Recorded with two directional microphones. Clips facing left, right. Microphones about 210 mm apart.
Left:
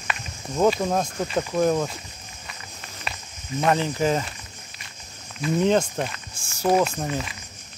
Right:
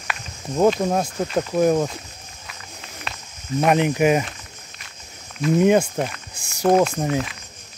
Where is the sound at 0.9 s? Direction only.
5° right (ahead or behind).